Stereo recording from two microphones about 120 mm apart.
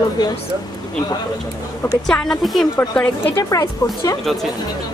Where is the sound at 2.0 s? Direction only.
5° left (ahead or behind).